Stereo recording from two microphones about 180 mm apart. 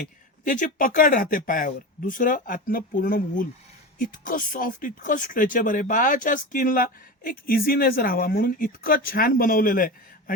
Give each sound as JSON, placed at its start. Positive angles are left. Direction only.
{"t": 0.4, "sound": "speech", "side_deg": 45}